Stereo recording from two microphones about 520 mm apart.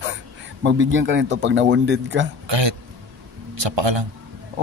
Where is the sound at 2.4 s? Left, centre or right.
Right.